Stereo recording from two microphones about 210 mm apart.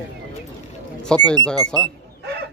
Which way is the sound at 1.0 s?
5° left (ahead or behind).